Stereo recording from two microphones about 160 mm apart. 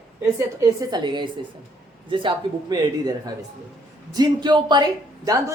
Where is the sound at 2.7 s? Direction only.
25° right (ahead or behind).